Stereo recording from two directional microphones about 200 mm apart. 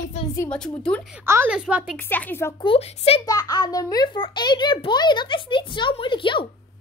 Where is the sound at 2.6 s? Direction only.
30° left (ahead or behind).